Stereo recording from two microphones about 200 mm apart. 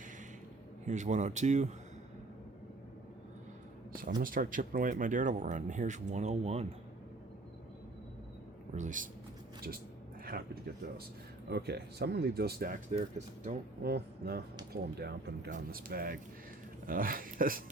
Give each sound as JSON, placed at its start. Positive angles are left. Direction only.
{"t": 0.9, "sound": "speech", "side_deg": -35}
{"t": 4.2, "sound": "speech", "side_deg": -45}
{"t": 8.7, "sound": "speech", "side_deg": -40}
{"t": 10.2, "sound": "speech", "side_deg": -50}
{"t": 13.8, "sound": "speech", "side_deg": -50}